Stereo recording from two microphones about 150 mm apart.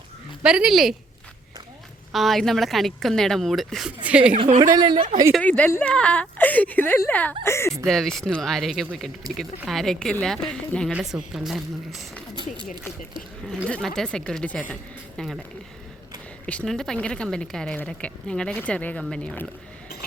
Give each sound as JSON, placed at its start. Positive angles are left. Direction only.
{"t": 0.4, "sound": "a woman's voice", "side_deg": -5}
{"t": 2.1, "sound": "a woman's voice", "side_deg": 0}
{"t": 4.6, "sound": "a woman's voice", "side_deg": -30}
{"t": 5.4, "sound": "a woman's voice", "side_deg": 10}
{"t": 7.9, "sound": "a woman's voice", "side_deg": 5}
{"t": 13.7, "sound": "a woman's voice", "side_deg": 5}
{"t": 16.5, "sound": "a woman's voice", "side_deg": 5}